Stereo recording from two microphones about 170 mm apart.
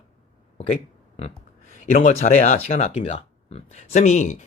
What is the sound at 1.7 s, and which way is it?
Speech, 50° left (ahead or behind).